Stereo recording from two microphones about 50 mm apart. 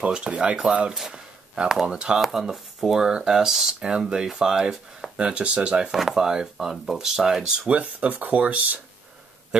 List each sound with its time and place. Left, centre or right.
0.0 s speech: right
0.9 s speech: centre
2.1 s speech: centre; by 5.9 s right
5.9 s speech: centre
7.7 s speech: right